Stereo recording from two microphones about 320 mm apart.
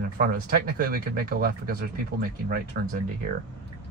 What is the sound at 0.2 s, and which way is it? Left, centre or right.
Speech, right.